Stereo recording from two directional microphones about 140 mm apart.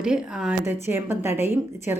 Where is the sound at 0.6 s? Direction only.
15° right (ahead or behind).